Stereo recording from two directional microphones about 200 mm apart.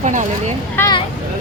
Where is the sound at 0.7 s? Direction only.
15° left (ahead or behind).